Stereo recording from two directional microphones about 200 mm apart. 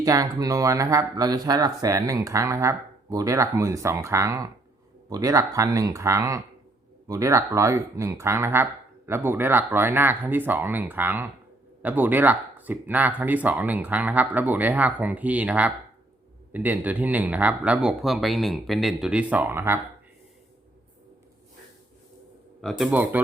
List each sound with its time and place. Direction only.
0.0 s speech: 20° right (ahead or behind)
22.6 s speech: 5° right (ahead or behind)